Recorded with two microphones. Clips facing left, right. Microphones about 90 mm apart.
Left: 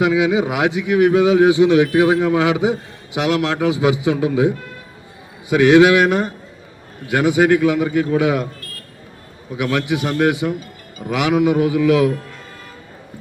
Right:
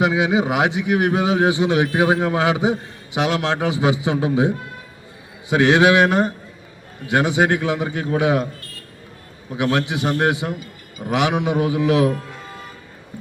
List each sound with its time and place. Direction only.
0.0 s a man's voice: 25° right (ahead or behind)
9.6 s a man's voice: 25° right (ahead or behind)